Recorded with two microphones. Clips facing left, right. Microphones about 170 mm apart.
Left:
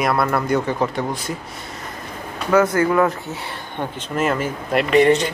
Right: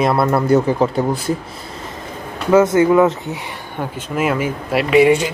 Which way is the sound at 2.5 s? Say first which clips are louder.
Right 5 dB; 20° right (ahead or behind).